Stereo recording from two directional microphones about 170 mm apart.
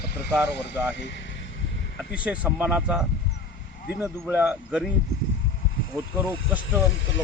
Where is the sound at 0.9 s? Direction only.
90° left.